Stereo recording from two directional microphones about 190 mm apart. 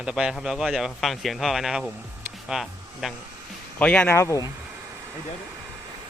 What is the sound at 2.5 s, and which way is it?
Speech, centre (ahead or behind).